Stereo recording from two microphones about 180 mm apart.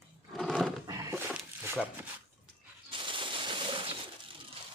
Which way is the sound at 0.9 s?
20° right (ahead or behind).